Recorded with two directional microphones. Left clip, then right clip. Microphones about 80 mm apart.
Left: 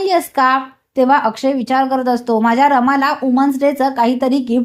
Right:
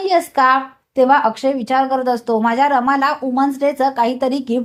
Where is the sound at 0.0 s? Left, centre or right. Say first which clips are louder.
Even; left.